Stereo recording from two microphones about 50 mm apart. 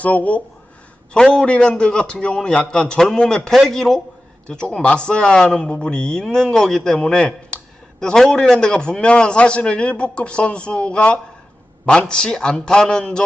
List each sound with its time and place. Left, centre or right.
0.0 s speech: left
1.1 s a man's voice: centre
4.4 s a man's voice: centre